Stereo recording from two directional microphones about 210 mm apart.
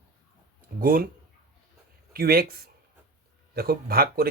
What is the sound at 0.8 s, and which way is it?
Speech, 40° right (ahead or behind).